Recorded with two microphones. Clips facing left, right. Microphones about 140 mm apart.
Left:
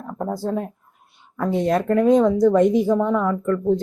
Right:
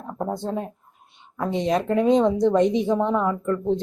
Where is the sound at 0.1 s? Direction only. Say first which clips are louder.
Left 1 dB; 20° right (ahead or behind).